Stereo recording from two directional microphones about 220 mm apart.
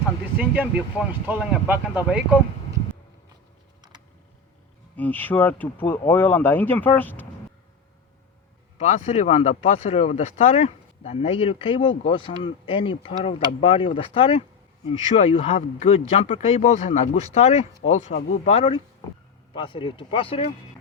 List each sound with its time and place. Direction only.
0.3 s speech: 10° right (ahead or behind)
4.9 s speech: 10° left (ahead or behind)
8.8 s speech: 30° left (ahead or behind)